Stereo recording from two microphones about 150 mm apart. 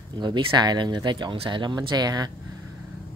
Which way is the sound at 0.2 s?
30° right (ahead or behind).